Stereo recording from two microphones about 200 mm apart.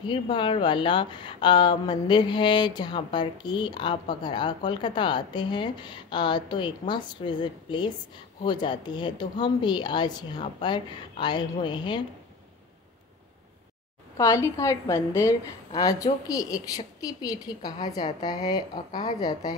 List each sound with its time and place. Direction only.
0.0 s speech: 25° left (ahead or behind)
14.1 s a woman's voice: 15° left (ahead or behind)